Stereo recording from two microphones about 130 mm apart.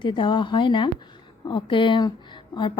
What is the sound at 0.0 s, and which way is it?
A woman's voice, 40° left (ahead or behind).